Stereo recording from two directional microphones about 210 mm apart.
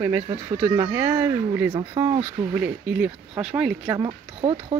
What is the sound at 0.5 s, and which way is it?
Speech, 10° right (ahead or behind).